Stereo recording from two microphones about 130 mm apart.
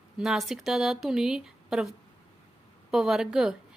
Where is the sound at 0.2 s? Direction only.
Centre (ahead or behind).